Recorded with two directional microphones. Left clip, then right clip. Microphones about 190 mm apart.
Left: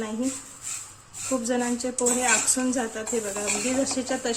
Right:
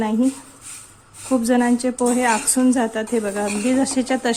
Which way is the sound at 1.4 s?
35° right (ahead or behind).